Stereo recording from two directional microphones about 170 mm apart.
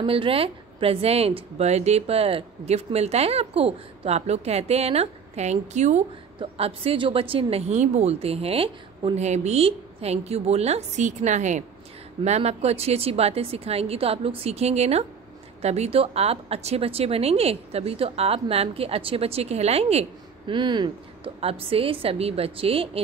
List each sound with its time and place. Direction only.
0.0 s a woman's voice: 30° right (ahead or behind)